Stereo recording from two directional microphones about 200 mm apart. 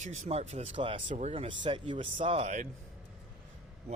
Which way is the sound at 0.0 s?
35° right (ahead or behind).